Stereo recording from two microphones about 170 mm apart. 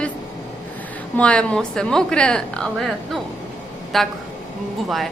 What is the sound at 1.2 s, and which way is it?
A woman's voice, 5° left (ahead or behind).